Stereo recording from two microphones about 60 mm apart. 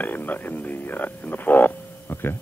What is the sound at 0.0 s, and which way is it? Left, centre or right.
A man's voice, left.